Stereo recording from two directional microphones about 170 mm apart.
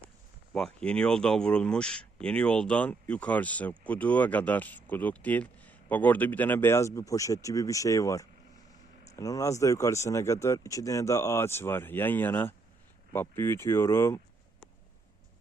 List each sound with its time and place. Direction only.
0.5 s a man's voice: 5° left (ahead or behind)